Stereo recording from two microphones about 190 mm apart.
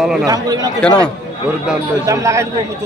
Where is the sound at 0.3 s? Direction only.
20° right (ahead or behind).